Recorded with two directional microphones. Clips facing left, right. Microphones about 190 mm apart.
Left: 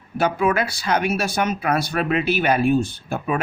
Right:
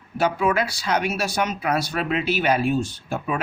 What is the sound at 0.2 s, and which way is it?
Speech, 55° left (ahead or behind).